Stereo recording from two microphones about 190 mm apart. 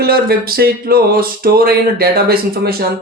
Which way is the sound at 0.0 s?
55° right (ahead or behind).